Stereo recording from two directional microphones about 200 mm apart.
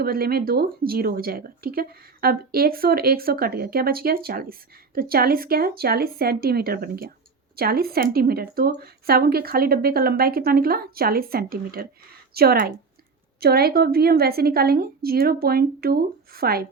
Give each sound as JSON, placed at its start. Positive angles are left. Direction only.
{"t": 0.0, "sound": "speech", "side_deg": -50}